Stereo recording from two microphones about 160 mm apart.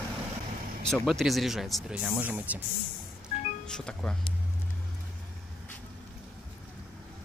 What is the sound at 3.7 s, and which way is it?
Speech, 5° left (ahead or behind).